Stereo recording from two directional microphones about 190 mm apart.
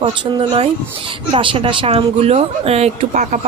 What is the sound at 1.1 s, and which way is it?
A woman's voice, 25° right (ahead or behind).